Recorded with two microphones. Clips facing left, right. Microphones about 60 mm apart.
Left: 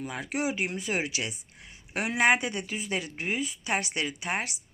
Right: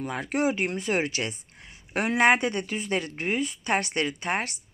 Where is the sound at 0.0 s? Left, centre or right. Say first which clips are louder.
Right 5 dB; centre.